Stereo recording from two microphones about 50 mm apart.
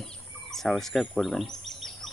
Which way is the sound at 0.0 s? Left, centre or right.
Centre.